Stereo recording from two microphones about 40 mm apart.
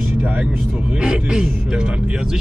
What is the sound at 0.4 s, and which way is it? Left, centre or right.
A man's voice, right.